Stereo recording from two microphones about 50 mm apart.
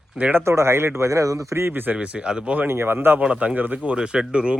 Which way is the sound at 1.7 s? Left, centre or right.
Right.